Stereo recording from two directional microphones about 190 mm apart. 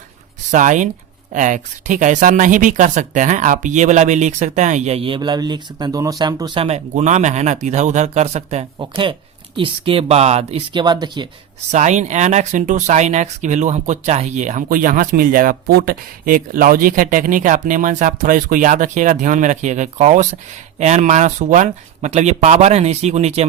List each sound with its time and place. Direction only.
0.5 s speech: 40° right (ahead or behind)
8.8 s speech: 25° right (ahead or behind)
11.7 s speech: 40° right (ahead or behind)